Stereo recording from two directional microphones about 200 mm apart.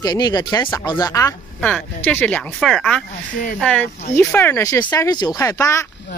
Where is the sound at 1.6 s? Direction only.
5° left (ahead or behind).